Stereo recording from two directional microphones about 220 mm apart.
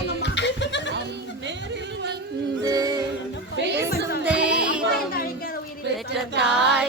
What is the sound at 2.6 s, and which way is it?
Music, 15° right (ahead or behind).